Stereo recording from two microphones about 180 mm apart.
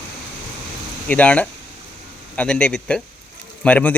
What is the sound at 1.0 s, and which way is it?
A man's voice, 10° left (ahead or behind).